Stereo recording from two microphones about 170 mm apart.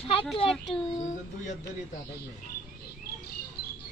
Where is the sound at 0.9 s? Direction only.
45° left (ahead or behind).